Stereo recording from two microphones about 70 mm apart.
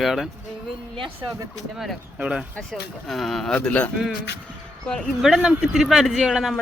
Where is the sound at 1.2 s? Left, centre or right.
Right.